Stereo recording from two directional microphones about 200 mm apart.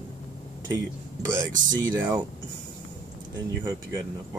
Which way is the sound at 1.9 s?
10° right (ahead or behind).